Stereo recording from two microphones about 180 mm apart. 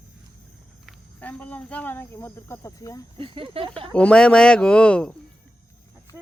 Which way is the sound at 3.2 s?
30° right (ahead or behind).